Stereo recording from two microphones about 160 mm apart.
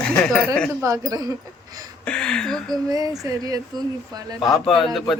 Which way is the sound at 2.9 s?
20° right (ahead or behind).